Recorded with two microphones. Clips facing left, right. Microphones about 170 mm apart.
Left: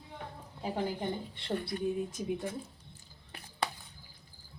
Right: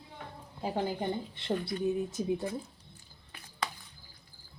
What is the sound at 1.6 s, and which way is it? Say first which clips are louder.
Speech: right 1 dB; 25° right (ahead or behind).